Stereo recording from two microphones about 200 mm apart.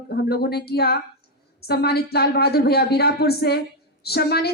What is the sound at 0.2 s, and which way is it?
A woman's voice, 50° left (ahead or behind).